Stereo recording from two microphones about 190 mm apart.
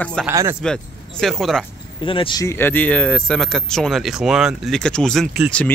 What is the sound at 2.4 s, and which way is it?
Speech, 10° left (ahead or behind).